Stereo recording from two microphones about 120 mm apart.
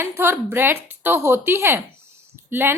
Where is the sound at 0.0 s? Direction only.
20° right (ahead or behind).